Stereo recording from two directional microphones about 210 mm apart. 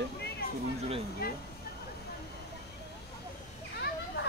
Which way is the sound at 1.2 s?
45° left (ahead or behind).